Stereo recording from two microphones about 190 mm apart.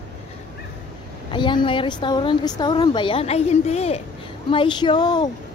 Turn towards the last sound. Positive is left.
turn(degrees=20)  # may be behind; listen again after turning